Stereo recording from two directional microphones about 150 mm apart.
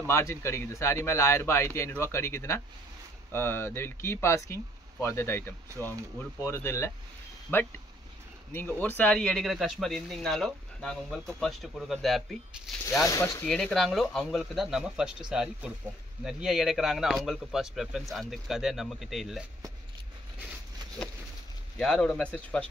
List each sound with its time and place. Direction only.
0.0 s speech: 20° left (ahead or behind); by 12.7 s centre (ahead or behind)
12.9 s speech: 20° left (ahead or behind)
13.5 s speech: 5° left (ahead or behind)
21.7 s speech: 5° left (ahead or behind)